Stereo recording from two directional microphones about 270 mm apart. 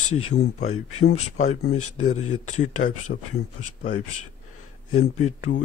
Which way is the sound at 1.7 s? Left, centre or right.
Left.